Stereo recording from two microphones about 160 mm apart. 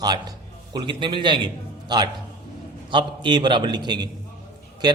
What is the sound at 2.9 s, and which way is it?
A man's voice, 30° right (ahead or behind).